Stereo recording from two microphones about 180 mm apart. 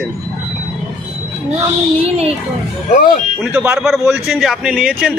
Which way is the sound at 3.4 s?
5° right (ahead or behind).